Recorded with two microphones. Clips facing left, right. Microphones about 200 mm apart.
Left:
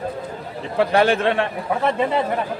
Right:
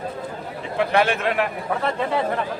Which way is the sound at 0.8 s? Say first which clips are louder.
Left 3 dB; 35° left (ahead or behind).